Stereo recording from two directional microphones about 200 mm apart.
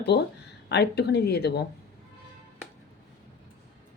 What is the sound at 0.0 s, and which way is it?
Speech, 55° left (ahead or behind).